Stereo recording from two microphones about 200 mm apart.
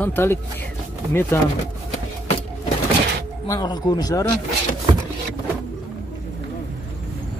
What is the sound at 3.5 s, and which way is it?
Speech, 20° left (ahead or behind).